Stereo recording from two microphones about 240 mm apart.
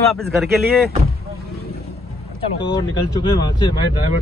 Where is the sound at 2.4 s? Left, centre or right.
Centre.